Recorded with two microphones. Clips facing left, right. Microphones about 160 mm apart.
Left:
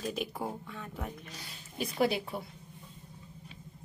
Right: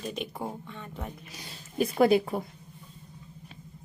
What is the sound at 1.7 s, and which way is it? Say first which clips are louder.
Speech: right 8 dB; 50° right (ahead or behind).